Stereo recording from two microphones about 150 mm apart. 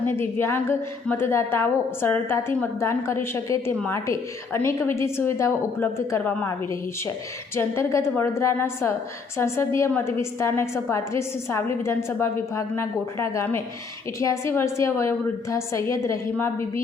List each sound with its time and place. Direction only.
0.0 s a woman's voice: 15° left (ahead or behind)
7.5 s a woman's voice: 20° left (ahead or behind)